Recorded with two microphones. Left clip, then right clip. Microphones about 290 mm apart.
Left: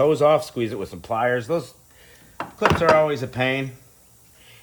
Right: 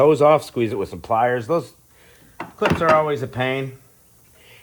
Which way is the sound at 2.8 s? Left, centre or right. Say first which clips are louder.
Right 1 dB; centre.